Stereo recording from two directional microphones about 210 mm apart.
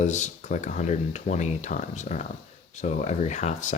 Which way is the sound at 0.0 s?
35° left (ahead or behind).